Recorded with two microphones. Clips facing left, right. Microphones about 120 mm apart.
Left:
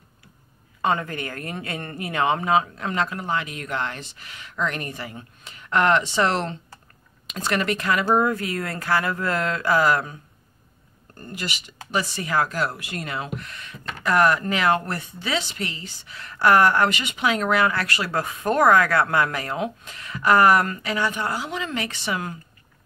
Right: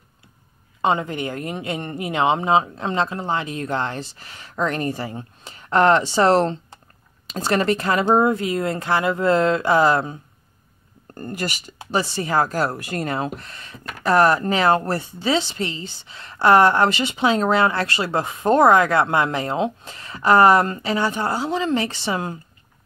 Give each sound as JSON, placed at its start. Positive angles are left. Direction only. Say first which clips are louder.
{"t": 0.8, "sound": "speech", "louder": "right 3 dB", "side_deg": -20}
{"t": 11.1, "sound": "speech", "louder": "right 5 dB", "side_deg": -45}
{"t": 11.9, "sound": "speech", "louder": "right 3 dB", "side_deg": -30}